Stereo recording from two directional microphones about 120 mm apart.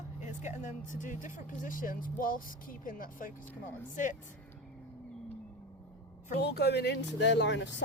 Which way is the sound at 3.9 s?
90° left.